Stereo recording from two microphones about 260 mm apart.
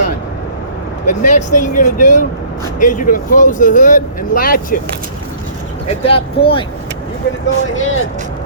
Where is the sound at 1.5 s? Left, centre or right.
Left.